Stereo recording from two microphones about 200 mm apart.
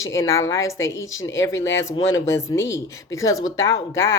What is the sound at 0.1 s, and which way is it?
Speech, 15° left (ahead or behind).